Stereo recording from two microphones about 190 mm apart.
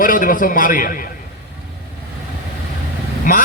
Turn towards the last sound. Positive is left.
turn(degrees=45)  # may be behind; listen again after turning